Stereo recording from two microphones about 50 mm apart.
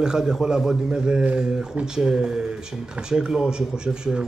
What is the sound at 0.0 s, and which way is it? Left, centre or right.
Speech, centre.